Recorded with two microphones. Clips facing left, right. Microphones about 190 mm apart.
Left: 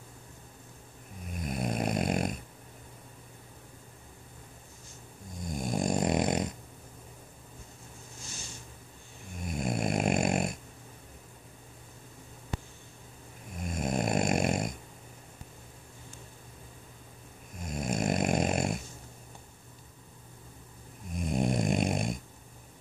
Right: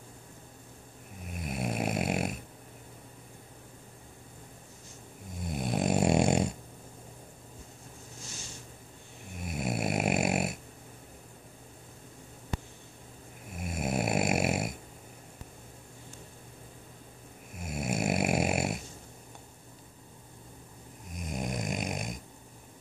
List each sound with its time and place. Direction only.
1.2 s snoring: 5° right (ahead or behind)
5.4 s snoring: 5° right (ahead or behind)
6.0 s dog: 25° right (ahead or behind)
9.4 s snoring: 5° right (ahead or behind)
13.5 s snoring: 5° right (ahead or behind)
17.6 s snoring: 5° right (ahead or behind)
21.2 s snoring: 30° left (ahead or behind)